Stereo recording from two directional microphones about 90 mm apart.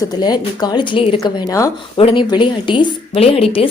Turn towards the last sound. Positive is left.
turn(degrees=90)